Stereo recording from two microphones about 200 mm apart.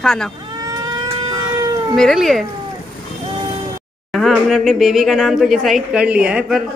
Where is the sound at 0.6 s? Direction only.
20° right (ahead or behind).